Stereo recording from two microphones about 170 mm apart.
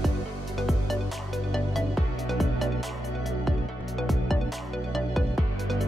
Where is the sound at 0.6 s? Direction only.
Centre (ahead or behind).